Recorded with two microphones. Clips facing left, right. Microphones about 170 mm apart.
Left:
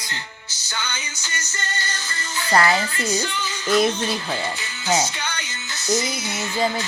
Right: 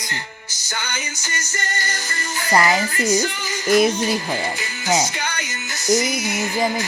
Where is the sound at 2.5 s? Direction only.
15° right (ahead or behind).